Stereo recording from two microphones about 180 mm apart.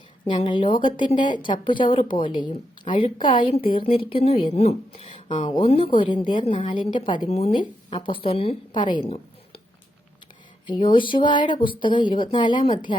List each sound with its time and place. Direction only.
0.3 s a woman's voice: 25° left (ahead or behind)
9.0 s a sound: 35° left (ahead or behind)
10.7 s a woman's voice: 25° left (ahead or behind)